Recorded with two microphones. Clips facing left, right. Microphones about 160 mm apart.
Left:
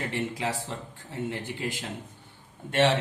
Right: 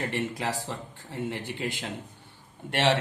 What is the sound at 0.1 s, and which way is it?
Speech, 65° right (ahead or behind).